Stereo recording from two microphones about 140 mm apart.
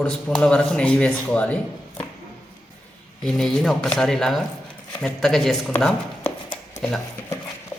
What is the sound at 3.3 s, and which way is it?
Speech, centre (ahead or behind).